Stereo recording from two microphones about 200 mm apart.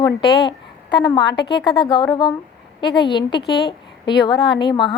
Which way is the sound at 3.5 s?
55° left (ahead or behind).